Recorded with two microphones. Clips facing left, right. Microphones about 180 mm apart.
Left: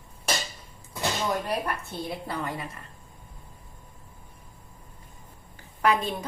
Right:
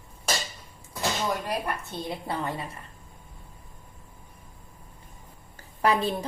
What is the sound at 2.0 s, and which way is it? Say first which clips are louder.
Speech: right 2 dB; 25° right (ahead or behind).